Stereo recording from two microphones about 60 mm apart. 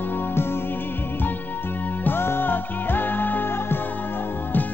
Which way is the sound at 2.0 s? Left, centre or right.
Left.